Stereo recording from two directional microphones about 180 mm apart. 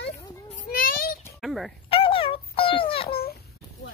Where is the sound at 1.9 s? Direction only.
30° left (ahead or behind).